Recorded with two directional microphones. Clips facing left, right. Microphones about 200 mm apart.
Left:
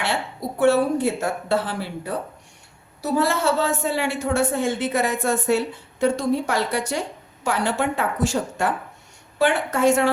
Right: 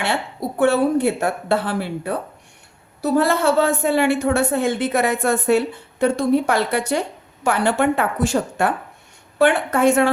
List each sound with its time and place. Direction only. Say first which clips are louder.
0.6 s a woman's voice: right 2 dB; 60° right (ahead or behind)